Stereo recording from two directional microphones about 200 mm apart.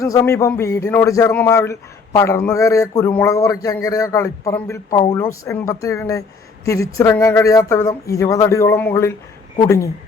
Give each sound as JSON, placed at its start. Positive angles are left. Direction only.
{"t": 0.0, "sound": "speech", "side_deg": 15}